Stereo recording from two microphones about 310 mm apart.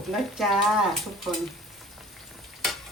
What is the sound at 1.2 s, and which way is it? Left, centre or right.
Frying, centre.